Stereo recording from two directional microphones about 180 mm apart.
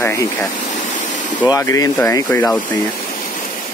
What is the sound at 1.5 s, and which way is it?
Speech, 20° left (ahead or behind).